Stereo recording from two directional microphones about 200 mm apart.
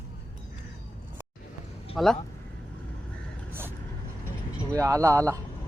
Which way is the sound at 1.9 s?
Centre (ahead or behind).